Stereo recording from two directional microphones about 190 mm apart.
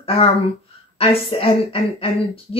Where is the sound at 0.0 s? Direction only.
30° left (ahead or behind).